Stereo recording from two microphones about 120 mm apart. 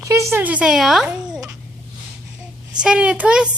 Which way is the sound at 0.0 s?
25° right (ahead or behind).